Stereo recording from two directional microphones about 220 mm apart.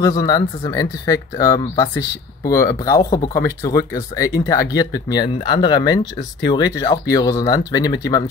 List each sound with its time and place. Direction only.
0.0 s speech: 15° left (ahead or behind)